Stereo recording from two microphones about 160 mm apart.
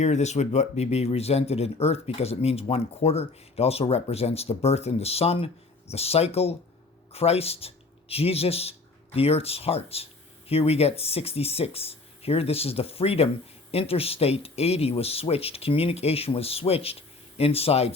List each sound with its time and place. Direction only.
0.0 s speech: 45° left (ahead or behind)